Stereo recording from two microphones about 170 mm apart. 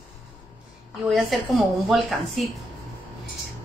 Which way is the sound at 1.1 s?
Centre (ahead or behind).